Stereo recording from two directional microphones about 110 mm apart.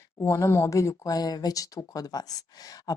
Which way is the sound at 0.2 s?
25° left (ahead or behind).